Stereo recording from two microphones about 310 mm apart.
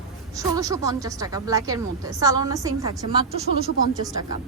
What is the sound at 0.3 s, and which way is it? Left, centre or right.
A woman's voice, centre.